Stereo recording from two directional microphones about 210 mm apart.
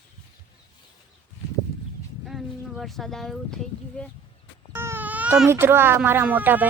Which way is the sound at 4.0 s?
5° left (ahead or behind).